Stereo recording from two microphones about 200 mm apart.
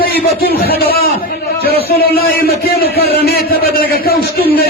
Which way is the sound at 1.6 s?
50° left (ahead or behind).